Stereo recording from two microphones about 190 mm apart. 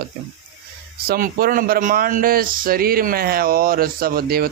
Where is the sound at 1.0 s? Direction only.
50° right (ahead or behind).